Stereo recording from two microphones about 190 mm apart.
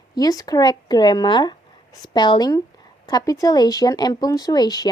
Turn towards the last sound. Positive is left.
turn(degrees=20)  # may be behind; listen again after turning